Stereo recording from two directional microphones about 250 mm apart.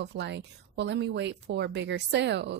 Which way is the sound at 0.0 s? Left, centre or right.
Right.